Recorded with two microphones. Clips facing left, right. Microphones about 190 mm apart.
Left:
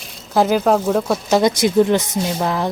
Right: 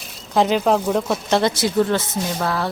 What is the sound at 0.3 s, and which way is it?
Speech, centre (ahead or behind).